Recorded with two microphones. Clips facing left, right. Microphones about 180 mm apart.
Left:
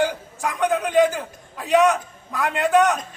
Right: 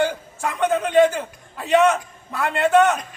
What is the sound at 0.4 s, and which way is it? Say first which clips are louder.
A man's voice: right 1 dB; centre (ahead or behind).